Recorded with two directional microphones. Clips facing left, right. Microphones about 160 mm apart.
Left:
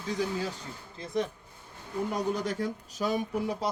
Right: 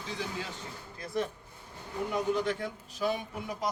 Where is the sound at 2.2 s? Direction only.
40° left (ahead or behind).